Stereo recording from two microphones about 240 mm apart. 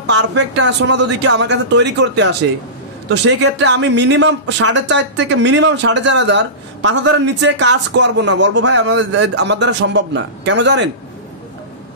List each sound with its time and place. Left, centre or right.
0.3 s speech: right